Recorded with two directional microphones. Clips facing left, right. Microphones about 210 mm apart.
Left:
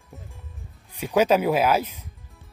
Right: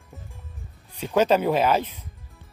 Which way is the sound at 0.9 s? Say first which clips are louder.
Even; 10° left (ahead or behind).